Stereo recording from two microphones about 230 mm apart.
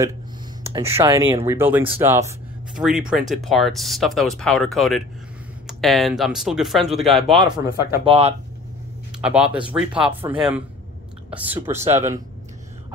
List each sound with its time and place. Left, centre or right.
0.7 s speech: centre
8.0 s speech: right
9.2 s speech: centre